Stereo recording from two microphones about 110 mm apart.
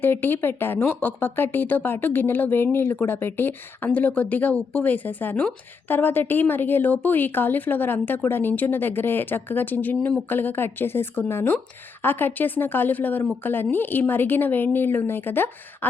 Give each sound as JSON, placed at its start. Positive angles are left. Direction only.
{"t": 0.0, "sound": "a woman's voice", "side_deg": 20}